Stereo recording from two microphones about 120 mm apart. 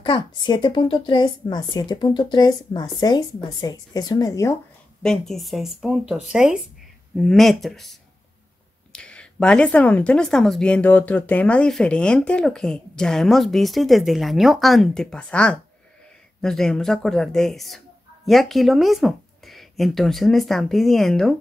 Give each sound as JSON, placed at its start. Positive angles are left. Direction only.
{"t": 0.0, "sound": "speech", "side_deg": 40}
{"t": 5.0, "sound": "speech", "side_deg": 5}